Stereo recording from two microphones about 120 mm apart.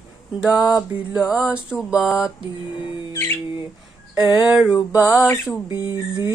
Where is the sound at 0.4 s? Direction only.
5° right (ahead or behind).